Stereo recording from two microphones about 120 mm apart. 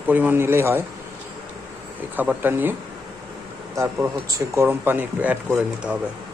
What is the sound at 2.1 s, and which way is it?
Speech, 15° right (ahead or behind).